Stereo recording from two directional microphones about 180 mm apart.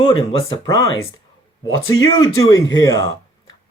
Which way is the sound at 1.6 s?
90° left.